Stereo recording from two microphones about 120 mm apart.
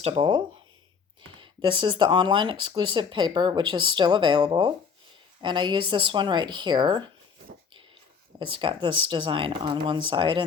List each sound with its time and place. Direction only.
0.0 s speech: 45° right (ahead or behind)
8.4 s speech: 45° right (ahead or behind)